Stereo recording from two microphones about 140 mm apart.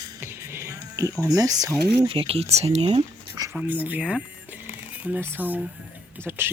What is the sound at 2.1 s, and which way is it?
Speech, 40° right (ahead or behind).